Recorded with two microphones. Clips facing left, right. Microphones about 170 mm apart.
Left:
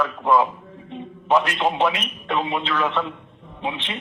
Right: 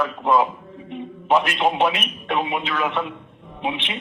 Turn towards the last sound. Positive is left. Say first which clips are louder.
# right 2 dB
turn(degrees=-20)  # may be behind; listen again after turning